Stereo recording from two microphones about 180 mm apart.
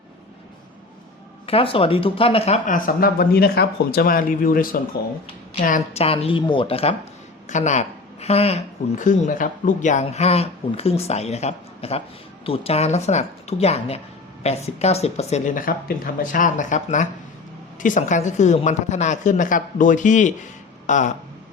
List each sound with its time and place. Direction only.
1.5 s speech: 30° left (ahead or behind); by 4.8 s 50° left (ahead or behind)
5.9 s speech: 35° left (ahead or behind)